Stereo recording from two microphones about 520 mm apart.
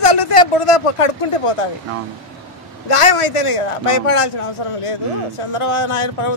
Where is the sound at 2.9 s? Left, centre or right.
Left.